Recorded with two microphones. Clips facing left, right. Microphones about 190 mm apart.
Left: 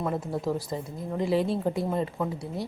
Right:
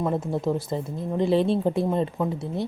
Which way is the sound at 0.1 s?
25° right (ahead or behind).